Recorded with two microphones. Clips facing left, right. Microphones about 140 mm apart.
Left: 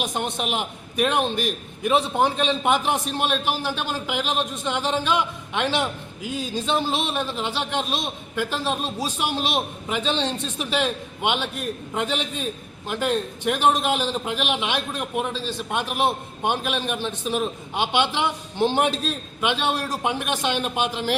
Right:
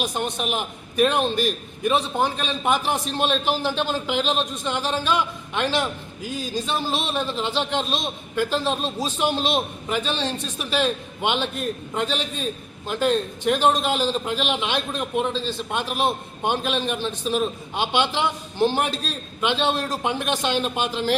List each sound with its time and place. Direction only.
0.0 s a man's voice: 20° left (ahead or behind)